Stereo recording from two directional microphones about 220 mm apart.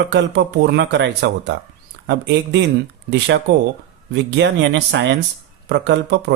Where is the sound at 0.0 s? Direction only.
50° right (ahead or behind).